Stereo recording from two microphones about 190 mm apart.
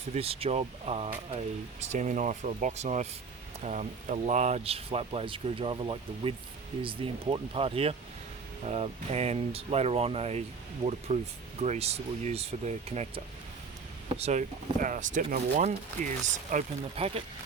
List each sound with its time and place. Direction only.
0.1 s speech: 30° right (ahead or behind)